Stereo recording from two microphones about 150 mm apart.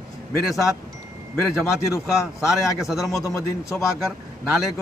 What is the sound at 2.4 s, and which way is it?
Speech, 5° right (ahead or behind).